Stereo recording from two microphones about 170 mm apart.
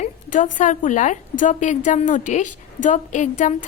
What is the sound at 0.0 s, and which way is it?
A woman's voice, 50° left (ahead or behind).